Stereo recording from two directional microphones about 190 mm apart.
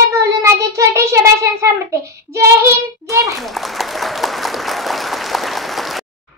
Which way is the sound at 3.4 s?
Centre (ahead or behind).